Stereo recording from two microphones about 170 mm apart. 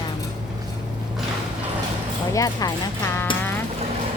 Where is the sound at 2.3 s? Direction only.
20° left (ahead or behind).